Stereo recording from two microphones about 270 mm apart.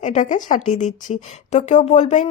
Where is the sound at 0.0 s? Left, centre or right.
Left.